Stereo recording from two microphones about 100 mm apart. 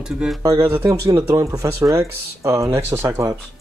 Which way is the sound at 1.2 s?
35° right (ahead or behind).